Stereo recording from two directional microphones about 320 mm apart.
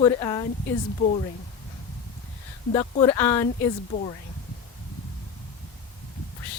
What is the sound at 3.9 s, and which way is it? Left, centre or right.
Speech, centre.